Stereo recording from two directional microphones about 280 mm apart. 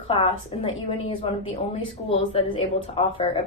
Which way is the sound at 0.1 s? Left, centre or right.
Left.